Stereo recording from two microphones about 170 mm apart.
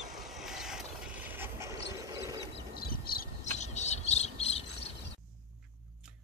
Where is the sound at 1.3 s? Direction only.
15° right (ahead or behind).